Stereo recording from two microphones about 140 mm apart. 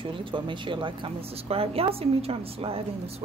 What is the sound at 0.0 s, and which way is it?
Speech, 35° right (ahead or behind).